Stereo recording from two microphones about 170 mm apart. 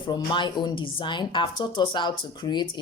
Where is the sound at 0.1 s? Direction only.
25° left (ahead or behind).